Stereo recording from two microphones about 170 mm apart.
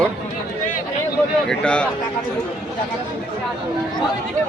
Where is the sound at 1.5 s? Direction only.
5° left (ahead or behind).